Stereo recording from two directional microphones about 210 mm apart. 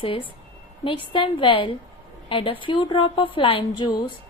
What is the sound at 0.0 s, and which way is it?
A woman's voice, 25° left (ahead or behind).